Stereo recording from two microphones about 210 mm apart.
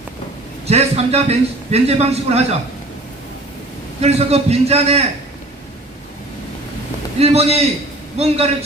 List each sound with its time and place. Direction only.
0.7 s a man's voice: 30° right (ahead or behind)
4.0 s a man's voice: 30° right (ahead or behind)
7.2 s a man's voice: 30° right (ahead or behind)